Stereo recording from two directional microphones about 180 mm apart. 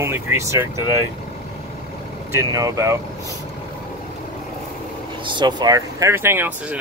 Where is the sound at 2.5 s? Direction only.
20° right (ahead or behind).